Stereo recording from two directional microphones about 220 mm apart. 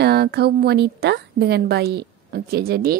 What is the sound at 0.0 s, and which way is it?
Speech, 50° right (ahead or behind).